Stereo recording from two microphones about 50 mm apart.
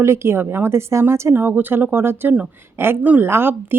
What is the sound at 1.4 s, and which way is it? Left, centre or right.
Speech, right.